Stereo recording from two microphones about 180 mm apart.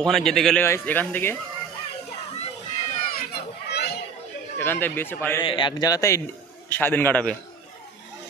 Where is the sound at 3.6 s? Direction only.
65° left (ahead or behind).